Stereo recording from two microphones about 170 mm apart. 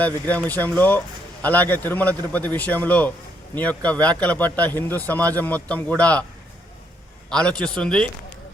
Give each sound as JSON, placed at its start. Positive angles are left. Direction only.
{"t": 0.0, "sound": "speech", "side_deg": 10}
{"t": 7.3, "sound": "a man's voice", "side_deg": 5}